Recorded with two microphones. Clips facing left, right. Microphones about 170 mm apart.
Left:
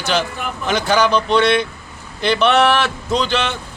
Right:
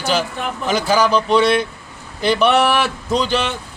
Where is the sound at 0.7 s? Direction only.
5° right (ahead or behind).